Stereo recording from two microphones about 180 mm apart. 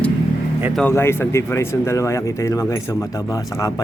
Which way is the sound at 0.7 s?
10° left (ahead or behind).